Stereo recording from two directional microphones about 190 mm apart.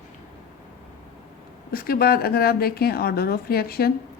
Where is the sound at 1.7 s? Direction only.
50° left (ahead or behind).